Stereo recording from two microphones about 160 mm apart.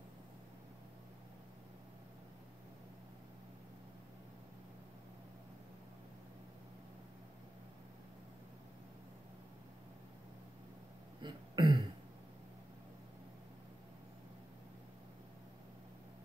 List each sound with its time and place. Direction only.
11.1 s throat clearing: 30° right (ahead or behind)